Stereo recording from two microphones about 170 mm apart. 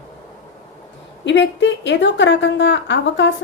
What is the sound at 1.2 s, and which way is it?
A woman's voice, 90° left.